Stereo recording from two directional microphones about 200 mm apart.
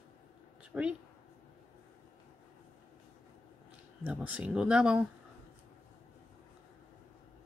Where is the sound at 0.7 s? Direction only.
10° right (ahead or behind).